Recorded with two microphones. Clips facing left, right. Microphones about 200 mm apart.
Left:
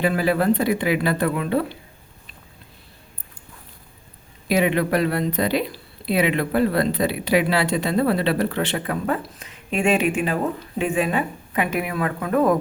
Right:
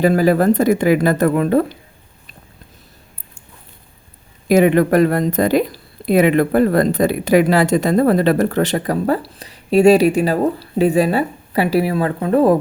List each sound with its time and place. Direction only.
0.0 s speech: 40° right (ahead or behind)
4.4 s speech: 45° right (ahead or behind); by 12.5 s 30° right (ahead or behind)